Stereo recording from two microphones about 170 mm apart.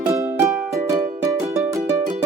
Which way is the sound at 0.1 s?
15° right (ahead or behind).